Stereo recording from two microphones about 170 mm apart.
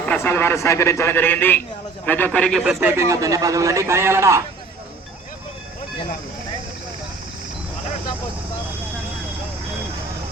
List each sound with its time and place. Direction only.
0.0 s a man's voice: 10° left (ahead or behind)
2.8 s a man's voice: 15° right (ahead or behind)